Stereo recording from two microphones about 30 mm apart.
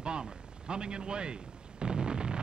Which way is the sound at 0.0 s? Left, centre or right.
Right.